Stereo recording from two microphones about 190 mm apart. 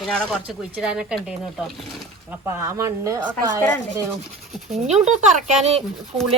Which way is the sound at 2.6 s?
15° right (ahead or behind).